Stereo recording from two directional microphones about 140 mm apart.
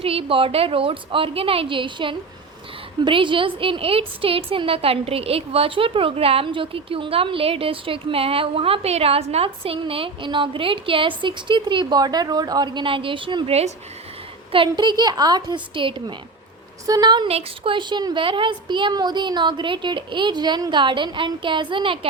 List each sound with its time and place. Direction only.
0.0 s a woman's voice: 40° right (ahead or behind)
14.5 s a woman's voice: 35° right (ahead or behind)